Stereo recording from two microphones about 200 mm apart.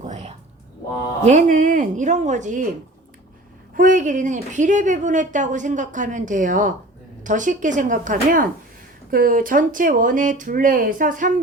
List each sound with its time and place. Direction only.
0.0 s a sound: 35° right (ahead or behind)
1.2 s a woman's voice: 35° right (ahead or behind)
3.8 s a woman's voice: 40° right (ahead or behind)